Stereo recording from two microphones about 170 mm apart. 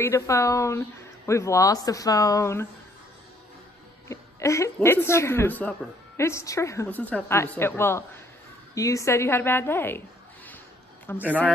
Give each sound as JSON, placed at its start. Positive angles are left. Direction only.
{"t": 0.0, "sound": "a woman's voice", "side_deg": 15}
{"t": 4.1, "sound": "a woman's voice", "side_deg": 15}